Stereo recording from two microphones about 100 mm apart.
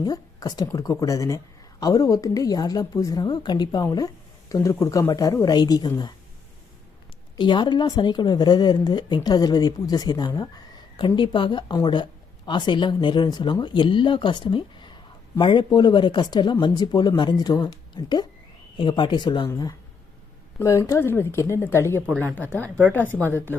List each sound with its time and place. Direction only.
0.0 s a woman's voice: 40° left (ahead or behind)
7.3 s a woman's voice: 50° left (ahead or behind)
20.6 s speech: 30° left (ahead or behind)